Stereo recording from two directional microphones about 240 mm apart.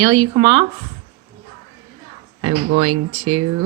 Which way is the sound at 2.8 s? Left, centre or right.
Right.